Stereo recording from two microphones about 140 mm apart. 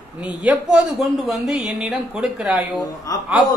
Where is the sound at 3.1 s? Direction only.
25° left (ahead or behind).